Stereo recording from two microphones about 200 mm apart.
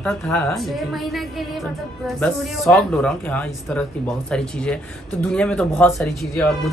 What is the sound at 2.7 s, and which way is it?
Speech, 5° left (ahead or behind).